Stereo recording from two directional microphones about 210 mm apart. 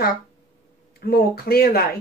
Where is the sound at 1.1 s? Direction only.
45° left (ahead or behind).